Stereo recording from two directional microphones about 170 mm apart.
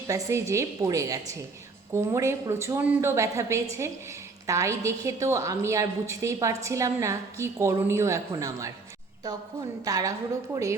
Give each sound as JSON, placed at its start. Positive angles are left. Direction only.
{"t": 0.1, "sound": "a woman's voice", "side_deg": -15}